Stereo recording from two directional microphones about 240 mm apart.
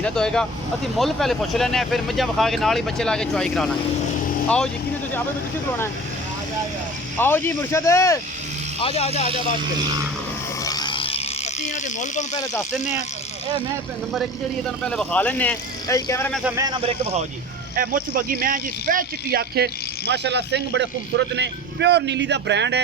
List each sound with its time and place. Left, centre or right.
0.0 s speech: centre
7.2 s speech: centre
8.8 s speech: left
10.6 s a sound: centre
14.8 s speech: centre
16.4 s speech: centre
17.7 s speech: right